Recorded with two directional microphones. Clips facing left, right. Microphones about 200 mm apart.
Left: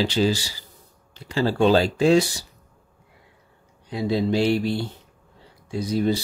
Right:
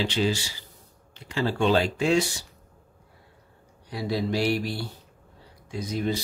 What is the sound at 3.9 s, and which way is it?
Speech, 25° left (ahead or behind).